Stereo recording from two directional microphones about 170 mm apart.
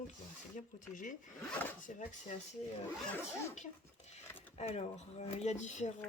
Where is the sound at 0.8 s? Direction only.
50° left (ahead or behind).